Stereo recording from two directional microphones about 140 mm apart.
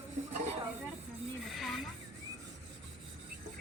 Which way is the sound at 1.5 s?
Centre (ahead or behind).